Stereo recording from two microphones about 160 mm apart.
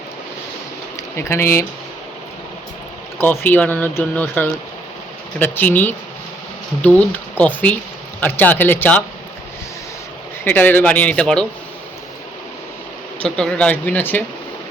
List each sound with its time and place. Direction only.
1.1 s speech: 15° left (ahead or behind)
3.2 s speech: 10° left (ahead or behind)
10.4 s speech: 10° left (ahead or behind)
13.2 s speech: 5° left (ahead or behind)